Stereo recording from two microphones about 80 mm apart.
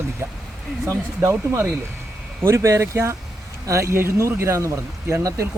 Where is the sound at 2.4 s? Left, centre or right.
Right.